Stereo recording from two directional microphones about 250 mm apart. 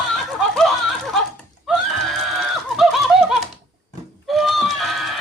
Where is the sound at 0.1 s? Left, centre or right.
Centre.